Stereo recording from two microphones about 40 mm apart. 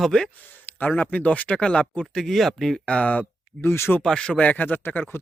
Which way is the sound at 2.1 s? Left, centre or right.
Centre.